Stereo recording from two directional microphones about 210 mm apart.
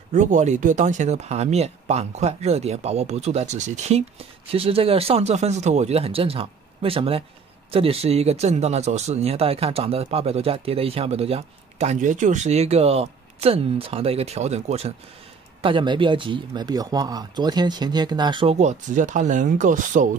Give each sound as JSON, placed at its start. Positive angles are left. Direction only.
{"t": 0.1, "sound": "speech", "side_deg": -35}